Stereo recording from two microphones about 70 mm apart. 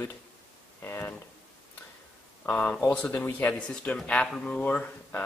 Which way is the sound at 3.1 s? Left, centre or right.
Left.